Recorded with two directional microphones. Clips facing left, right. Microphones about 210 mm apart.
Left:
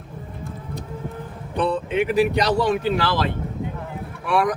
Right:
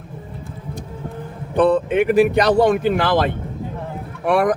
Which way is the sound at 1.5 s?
50° right (ahead or behind).